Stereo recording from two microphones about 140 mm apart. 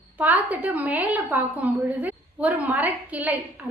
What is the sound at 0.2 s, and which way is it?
A woman's voice, 10° right (ahead or behind).